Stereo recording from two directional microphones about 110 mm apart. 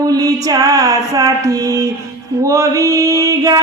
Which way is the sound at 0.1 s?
35° right (ahead or behind).